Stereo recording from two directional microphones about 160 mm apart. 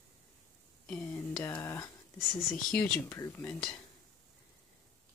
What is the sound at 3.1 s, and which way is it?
Speech, 20° left (ahead or behind).